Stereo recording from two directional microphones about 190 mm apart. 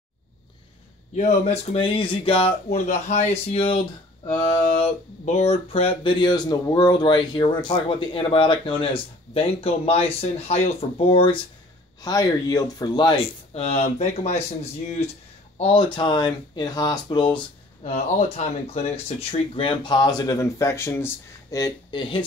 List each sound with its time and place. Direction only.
1.1 s speech: 35° left (ahead or behind)